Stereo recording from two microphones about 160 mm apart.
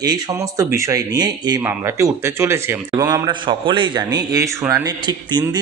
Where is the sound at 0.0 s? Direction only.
25° right (ahead or behind).